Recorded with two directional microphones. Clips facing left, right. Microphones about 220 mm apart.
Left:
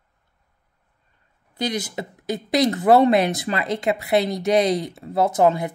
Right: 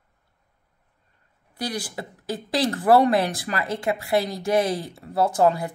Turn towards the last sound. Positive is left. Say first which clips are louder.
# left 2 dB
turn(degrees=20)  # may be behind; listen again after turning